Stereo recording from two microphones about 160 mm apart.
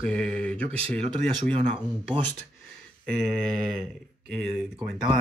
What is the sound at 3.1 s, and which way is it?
Speech, 5° left (ahead or behind).